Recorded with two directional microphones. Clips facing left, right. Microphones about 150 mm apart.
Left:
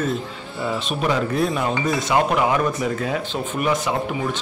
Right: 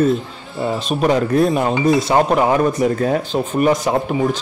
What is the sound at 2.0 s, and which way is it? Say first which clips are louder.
Speech: right 4 dB; 35° right (ahead or behind).